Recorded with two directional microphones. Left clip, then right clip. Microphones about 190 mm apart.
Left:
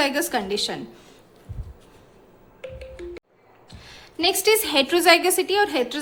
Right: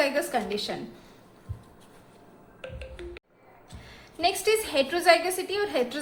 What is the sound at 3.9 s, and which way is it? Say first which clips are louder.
A woman's voice: left 4 dB; 35° left (ahead or behind).